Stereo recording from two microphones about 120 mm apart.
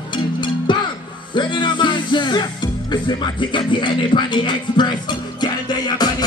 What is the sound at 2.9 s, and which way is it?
Music, 40° left (ahead or behind).